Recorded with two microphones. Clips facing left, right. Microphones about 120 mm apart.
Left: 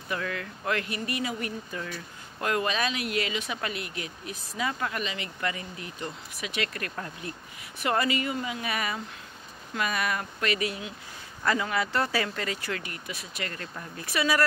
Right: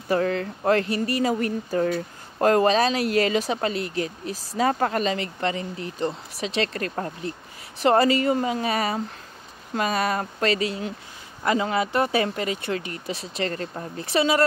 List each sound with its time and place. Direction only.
0.1 s speech: 35° right (ahead or behind)